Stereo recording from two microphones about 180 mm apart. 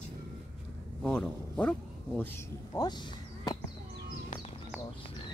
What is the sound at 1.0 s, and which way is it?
Speech, 5° left (ahead or behind).